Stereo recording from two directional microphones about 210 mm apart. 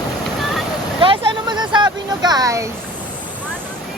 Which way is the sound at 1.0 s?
25° right (ahead or behind).